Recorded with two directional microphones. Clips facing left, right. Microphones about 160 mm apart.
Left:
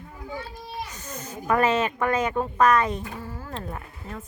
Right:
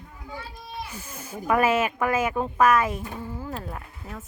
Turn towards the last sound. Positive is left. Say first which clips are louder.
# left 1 dB
turn(degrees=0)  # may be behind; listen again after turning